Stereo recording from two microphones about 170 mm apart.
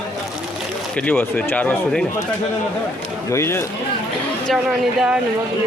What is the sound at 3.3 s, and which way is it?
Speech, 15° left (ahead or behind).